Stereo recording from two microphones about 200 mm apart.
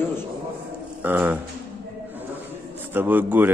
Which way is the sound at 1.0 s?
10° right (ahead or behind).